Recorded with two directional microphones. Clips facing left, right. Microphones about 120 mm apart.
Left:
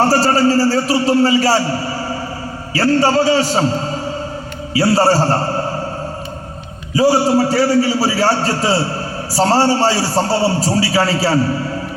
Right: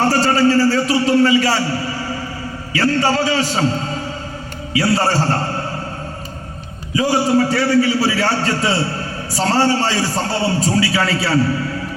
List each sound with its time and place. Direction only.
0.1 s a man's voice: 35° left (ahead or behind)
6.9 s a man's voice: 35° left (ahead or behind)